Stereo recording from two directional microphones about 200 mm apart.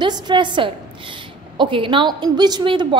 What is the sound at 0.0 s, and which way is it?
A woman's voice, 25° right (ahead or behind).